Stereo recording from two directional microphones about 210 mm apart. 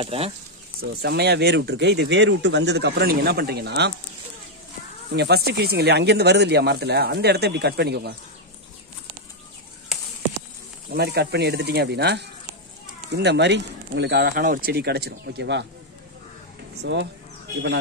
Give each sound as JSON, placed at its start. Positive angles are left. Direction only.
{"t": 0.0, "sound": "speech", "side_deg": -25}
{"t": 0.7, "sound": "speech", "side_deg": -50}
{"t": 5.1, "sound": "speech", "side_deg": -50}
{"t": 10.9, "sound": "speech", "side_deg": -50}
{"t": 16.8, "sound": "speech", "side_deg": -55}